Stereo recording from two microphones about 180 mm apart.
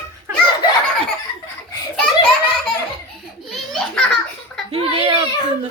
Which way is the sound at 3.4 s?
Centre (ahead or behind).